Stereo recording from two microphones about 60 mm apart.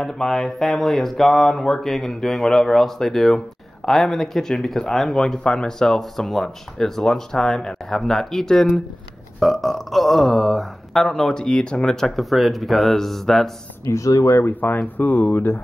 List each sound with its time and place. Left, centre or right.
0.0 s a sound: centre
5.4 s speech: centre
13.8 s speech: left
14.4 s speech: left